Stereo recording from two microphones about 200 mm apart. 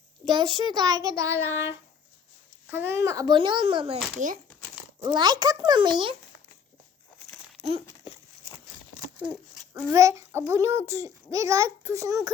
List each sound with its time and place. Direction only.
0.3 s a child's voice: 25° right (ahead or behind)
5.0 s a child's voice: 20° right (ahead or behind)
7.6 s crumpling: 30° right (ahead or behind)
9.9 s a child's voice: 15° right (ahead or behind)